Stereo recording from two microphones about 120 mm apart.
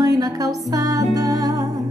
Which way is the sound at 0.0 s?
30° right (ahead or behind).